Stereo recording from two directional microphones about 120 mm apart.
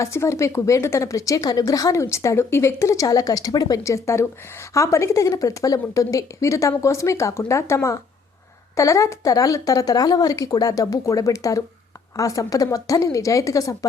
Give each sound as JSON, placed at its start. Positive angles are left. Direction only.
{"t": 0.0, "sound": "speech", "side_deg": 25}